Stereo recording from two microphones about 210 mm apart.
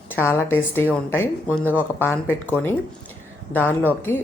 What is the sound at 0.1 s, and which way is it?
Speech, 10° left (ahead or behind).